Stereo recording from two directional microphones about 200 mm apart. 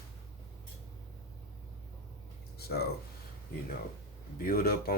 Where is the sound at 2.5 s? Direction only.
50° left (ahead or behind).